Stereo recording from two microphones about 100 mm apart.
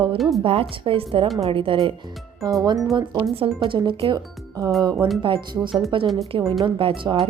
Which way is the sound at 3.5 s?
55° right (ahead or behind).